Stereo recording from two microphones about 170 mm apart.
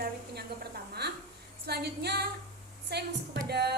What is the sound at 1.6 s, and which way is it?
A woman's voice, 70° right (ahead or behind).